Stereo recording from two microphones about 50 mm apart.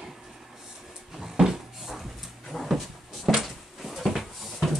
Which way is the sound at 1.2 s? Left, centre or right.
Centre.